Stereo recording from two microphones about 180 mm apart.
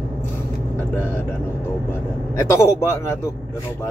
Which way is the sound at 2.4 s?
15° left (ahead or behind).